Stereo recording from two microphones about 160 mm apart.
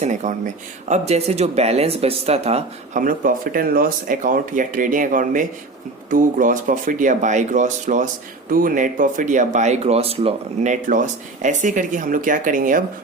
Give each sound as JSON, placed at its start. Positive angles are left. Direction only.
{"t": 0.0, "sound": "speech", "side_deg": -50}
{"t": 3.0, "sound": "speech", "side_deg": -60}